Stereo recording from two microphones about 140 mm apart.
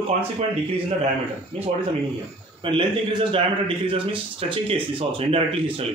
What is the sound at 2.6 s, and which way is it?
A man's voice, 35° right (ahead or behind).